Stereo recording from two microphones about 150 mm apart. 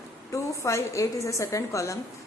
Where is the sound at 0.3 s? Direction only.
20° left (ahead or behind).